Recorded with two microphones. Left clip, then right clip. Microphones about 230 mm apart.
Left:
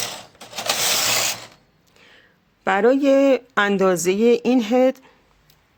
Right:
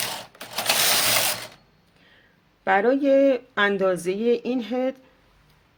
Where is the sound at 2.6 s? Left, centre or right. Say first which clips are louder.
Left 3 dB; left.